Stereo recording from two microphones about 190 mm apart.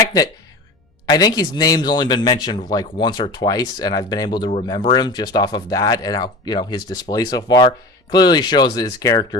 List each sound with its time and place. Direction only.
1.0 s speech: 20° left (ahead or behind)